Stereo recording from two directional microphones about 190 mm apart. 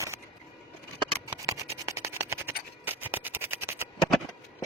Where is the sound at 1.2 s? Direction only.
15° right (ahead or behind).